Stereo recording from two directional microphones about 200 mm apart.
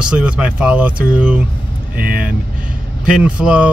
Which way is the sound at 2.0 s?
45° right (ahead or behind).